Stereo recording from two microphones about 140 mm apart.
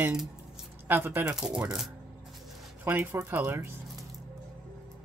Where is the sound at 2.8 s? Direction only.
15° right (ahead or behind).